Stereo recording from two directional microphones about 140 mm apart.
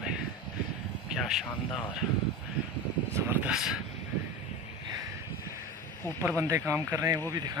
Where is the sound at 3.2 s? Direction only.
15° right (ahead or behind).